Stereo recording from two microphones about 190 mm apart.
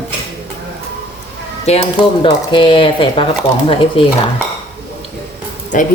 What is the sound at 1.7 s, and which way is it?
Speech, 30° left (ahead or behind).